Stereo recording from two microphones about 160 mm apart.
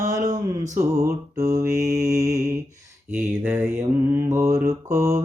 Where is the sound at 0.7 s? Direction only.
20° right (ahead or behind).